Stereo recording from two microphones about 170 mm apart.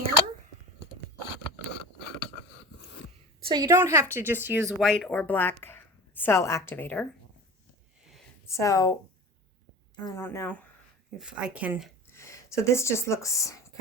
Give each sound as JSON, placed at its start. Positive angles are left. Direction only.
{"t": 3.4, "sound": "a woman's voice", "side_deg": -25}
{"t": 4.8, "sound": "a woman's voice", "side_deg": 0}
{"t": 8.4, "sound": "speech", "side_deg": 20}
{"t": 10.0, "sound": "speech", "side_deg": 25}
{"t": 10.2, "sound": "speech", "side_deg": 10}
{"t": 11.2, "sound": "speech", "side_deg": -5}
{"t": 12.1, "sound": "speech", "side_deg": 15}